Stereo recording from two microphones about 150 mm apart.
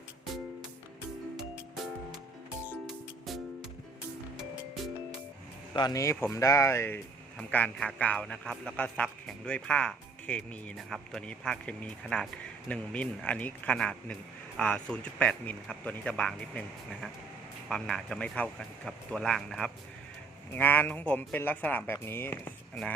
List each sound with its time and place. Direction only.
2.8 s music: centre (ahead or behind)
5.7 s a man's voice: 25° left (ahead or behind); by 22.9 s 10° left (ahead or behind)